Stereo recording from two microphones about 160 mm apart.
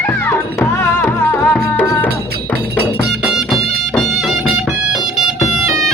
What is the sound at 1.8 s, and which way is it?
Cowbell, 15° left (ahead or behind).